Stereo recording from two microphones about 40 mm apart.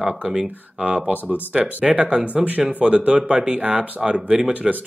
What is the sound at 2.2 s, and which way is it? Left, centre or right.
Speech, right.